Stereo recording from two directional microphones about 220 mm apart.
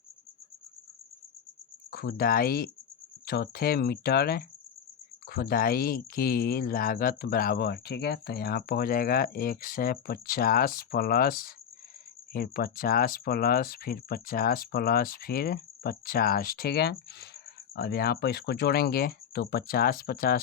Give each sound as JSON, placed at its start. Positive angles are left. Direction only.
{"t": 1.9, "sound": "speech", "side_deg": 45}